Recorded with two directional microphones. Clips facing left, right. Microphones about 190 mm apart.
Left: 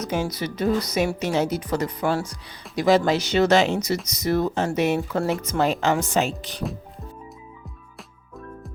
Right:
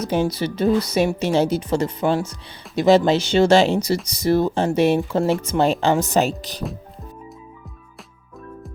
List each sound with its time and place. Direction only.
0.0 s speech: 30° right (ahead or behind)